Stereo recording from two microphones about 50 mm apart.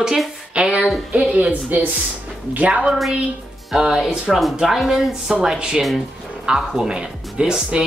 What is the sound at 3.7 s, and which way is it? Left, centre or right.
Speech, centre.